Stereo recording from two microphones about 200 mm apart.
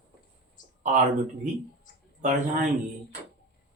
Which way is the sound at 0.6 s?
40° left (ahead or behind).